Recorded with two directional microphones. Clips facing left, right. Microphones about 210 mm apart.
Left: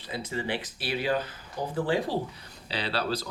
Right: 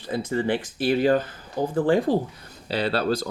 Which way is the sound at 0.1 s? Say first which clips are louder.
Right 8 dB; 50° right (ahead or behind).